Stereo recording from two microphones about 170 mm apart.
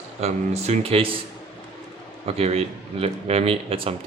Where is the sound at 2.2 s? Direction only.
35° right (ahead or behind).